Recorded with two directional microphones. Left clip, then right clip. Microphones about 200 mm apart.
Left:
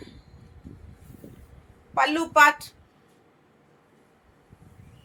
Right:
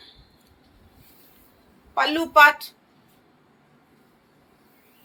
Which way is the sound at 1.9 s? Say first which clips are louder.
Right 1 dB; 20° left (ahead or behind).